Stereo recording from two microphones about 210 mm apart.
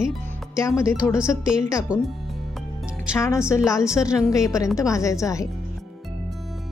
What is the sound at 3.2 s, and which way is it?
Speech, 15° left (ahead or behind).